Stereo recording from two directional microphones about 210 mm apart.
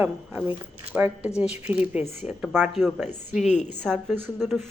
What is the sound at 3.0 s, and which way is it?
Speech, 35° left (ahead or behind).